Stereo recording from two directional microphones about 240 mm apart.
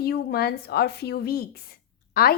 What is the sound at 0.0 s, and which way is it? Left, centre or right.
A woman's voice, left.